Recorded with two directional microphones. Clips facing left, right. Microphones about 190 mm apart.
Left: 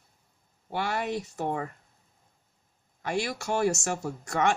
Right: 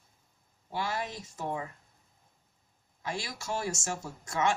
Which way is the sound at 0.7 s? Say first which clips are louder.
Left 5 dB; 60° left (ahead or behind).